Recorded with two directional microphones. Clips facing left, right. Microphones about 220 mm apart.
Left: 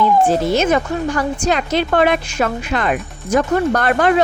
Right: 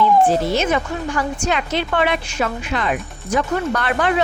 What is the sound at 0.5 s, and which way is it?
Speech, 45° left (ahead or behind).